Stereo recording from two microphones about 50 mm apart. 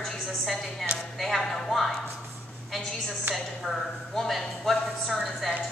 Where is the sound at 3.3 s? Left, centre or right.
Centre.